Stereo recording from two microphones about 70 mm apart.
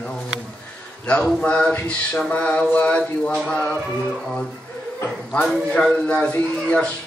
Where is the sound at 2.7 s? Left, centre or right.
Left.